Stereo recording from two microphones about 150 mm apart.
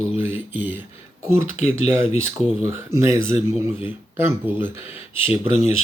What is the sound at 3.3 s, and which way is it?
Speech, 40° left (ahead or behind).